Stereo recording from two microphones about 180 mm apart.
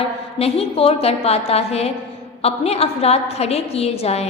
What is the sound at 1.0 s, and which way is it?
A woman's voice, 35° left (ahead or behind).